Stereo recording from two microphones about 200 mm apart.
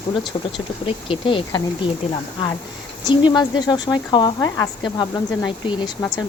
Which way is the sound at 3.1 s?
20° left (ahead or behind).